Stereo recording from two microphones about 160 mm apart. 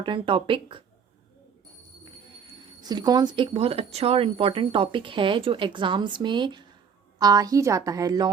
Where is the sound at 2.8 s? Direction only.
25° right (ahead or behind).